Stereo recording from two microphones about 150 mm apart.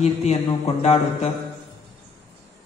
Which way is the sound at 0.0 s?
45° left (ahead or behind).